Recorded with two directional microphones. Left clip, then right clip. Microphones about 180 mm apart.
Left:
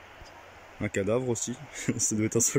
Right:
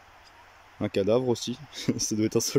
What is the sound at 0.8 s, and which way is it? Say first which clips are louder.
Speech: right 4 dB; 15° right (ahead or behind).